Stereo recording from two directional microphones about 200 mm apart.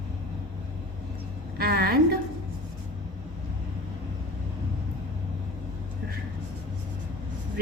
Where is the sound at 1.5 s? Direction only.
50° right (ahead or behind).